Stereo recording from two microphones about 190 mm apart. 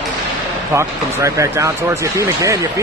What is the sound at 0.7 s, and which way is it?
Speech, 15° right (ahead or behind).